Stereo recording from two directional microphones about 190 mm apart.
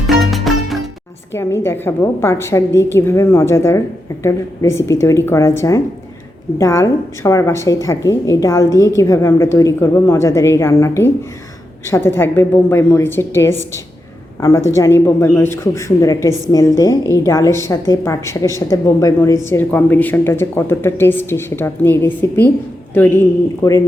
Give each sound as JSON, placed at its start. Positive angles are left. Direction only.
{"t": 0.1, "sound": "music", "side_deg": 0}
{"t": 1.3, "sound": "speech", "side_deg": 15}